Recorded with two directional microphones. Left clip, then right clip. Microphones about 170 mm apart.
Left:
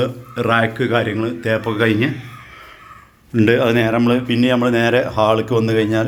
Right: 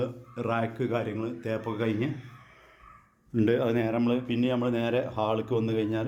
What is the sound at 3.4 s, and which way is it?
Speech, 10° right (ahead or behind).